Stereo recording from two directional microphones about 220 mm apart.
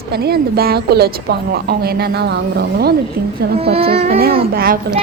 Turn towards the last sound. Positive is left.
turn(degrees=-40)  # may be behind; listen again after turning